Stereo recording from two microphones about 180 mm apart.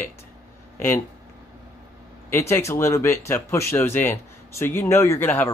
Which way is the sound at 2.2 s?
15° left (ahead or behind).